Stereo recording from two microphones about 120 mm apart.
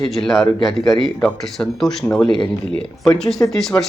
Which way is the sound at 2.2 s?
40° left (ahead or behind).